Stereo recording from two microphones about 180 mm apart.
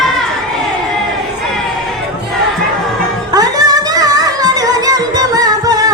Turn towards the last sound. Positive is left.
turn(degrees=-20)  # may be behind; listen again after turning